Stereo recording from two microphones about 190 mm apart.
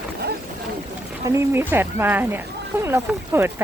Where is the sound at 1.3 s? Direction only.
15° right (ahead or behind).